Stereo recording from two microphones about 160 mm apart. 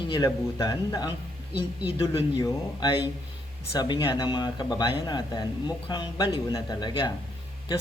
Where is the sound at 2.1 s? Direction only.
25° left (ahead or behind).